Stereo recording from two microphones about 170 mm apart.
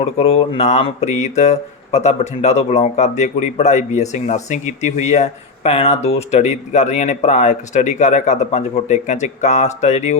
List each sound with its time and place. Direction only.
0.0 s speech: 35° left (ahead or behind)